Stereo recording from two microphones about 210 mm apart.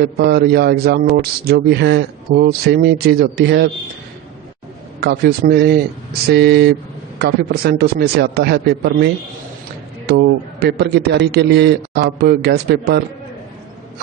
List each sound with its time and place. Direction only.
0.0 s a man's voice: 50° right (ahead or behind)
5.0 s a man's voice: 50° right (ahead or behind)